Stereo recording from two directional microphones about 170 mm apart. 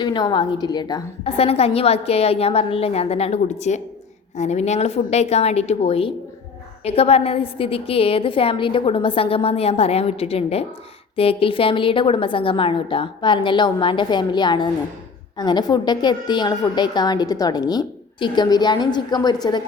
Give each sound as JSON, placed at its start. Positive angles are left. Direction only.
{"t": 0.0, "sound": "a woman's voice", "side_deg": 25}
{"t": 1.2, "sound": "a woman's voice", "side_deg": 35}